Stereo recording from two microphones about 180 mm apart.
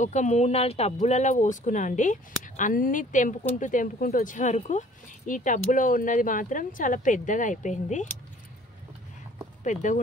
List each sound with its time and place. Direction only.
0.0 s speech: 40° left (ahead or behind)
9.6 s speech: 45° left (ahead or behind)